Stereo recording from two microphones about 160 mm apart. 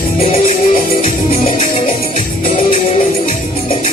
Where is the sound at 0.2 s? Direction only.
40° left (ahead or behind).